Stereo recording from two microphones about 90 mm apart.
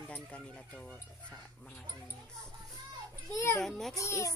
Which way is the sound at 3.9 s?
35° left (ahead or behind).